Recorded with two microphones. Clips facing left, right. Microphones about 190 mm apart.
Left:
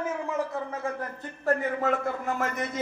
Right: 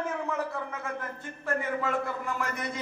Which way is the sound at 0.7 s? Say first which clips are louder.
Left 4 dB; 35° left (ahead or behind).